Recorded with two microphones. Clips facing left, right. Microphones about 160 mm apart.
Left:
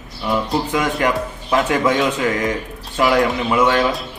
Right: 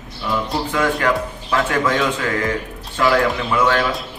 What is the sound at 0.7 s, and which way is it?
A man's voice, 15° left (ahead or behind).